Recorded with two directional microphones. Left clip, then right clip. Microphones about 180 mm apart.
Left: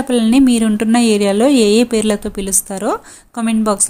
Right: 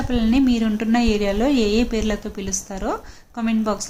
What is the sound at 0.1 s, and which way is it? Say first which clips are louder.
A woman's voice: left 7 dB; 45° left (ahead or behind).